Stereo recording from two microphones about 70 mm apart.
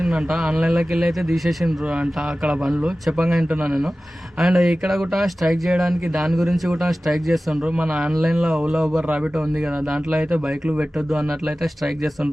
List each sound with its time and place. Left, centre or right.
0.0 s speech: centre
2.0 s speech: centre
8.1 s speech: centre
11.1 s speech: centre